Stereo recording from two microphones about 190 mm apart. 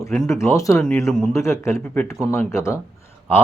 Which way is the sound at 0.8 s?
5° left (ahead or behind).